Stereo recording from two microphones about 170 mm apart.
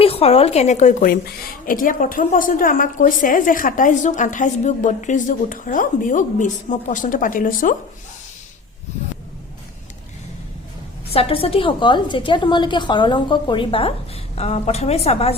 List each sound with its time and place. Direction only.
0.0 s a woman's voice: 35° left (ahead or behind); by 7.8 s 55° left (ahead or behind)
11.1 s a woman's voice: 35° left (ahead or behind)